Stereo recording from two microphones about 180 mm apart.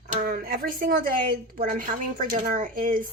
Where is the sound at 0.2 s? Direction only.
55° right (ahead or behind).